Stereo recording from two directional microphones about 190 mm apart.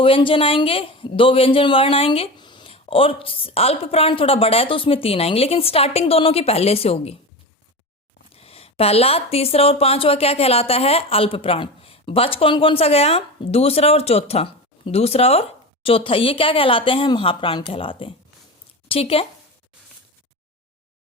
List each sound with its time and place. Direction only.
0.0 s a man's voice: 30° left (ahead or behind)
8.4 s speech: 30° left (ahead or behind)